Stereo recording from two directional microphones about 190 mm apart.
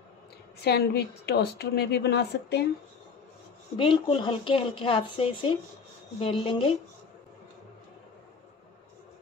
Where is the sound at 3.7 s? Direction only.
25° left (ahead or behind).